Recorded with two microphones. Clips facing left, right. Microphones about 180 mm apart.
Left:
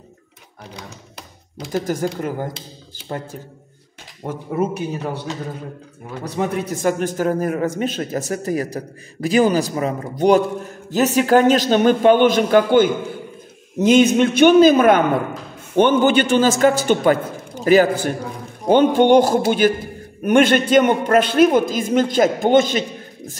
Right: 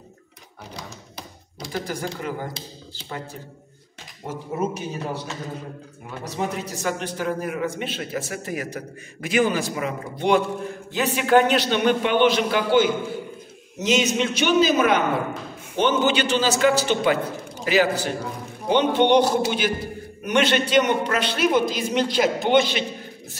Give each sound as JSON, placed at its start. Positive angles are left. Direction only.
{"t": 1.6, "sound": "a man's voice", "side_deg": 45}
{"t": 4.3, "sound": "a man's voice", "side_deg": 60}
{"t": 6.3, "sound": "a man's voice", "side_deg": 55}